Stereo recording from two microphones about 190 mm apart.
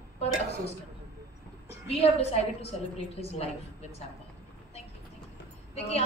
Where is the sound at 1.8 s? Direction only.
30° left (ahead or behind).